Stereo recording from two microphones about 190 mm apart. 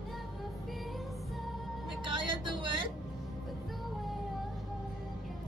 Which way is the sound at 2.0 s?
25° right (ahead or behind).